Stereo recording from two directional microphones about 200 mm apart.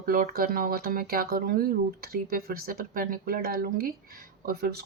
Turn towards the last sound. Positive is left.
turn(degrees=-50)  # may be behind; listen again after turning